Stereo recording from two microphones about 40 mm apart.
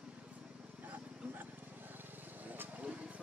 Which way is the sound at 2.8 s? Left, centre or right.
Right.